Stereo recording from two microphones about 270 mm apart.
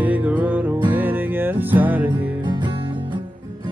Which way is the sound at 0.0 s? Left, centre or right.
Centre.